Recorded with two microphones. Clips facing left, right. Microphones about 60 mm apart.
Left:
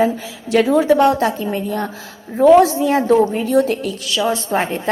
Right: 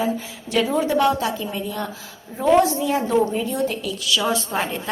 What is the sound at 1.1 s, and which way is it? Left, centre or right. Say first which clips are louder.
Speech: left 6 dB; left.